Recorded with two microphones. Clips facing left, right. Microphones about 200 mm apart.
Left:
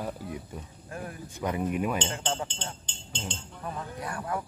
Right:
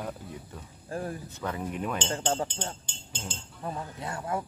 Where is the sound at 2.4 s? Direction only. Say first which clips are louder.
Right 3 dB; 10° right (ahead or behind).